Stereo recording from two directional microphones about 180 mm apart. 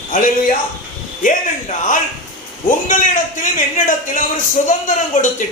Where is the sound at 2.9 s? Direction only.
45° left (ahead or behind).